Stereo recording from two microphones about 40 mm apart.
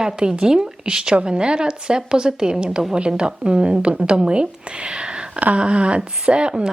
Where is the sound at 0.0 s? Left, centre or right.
Centre.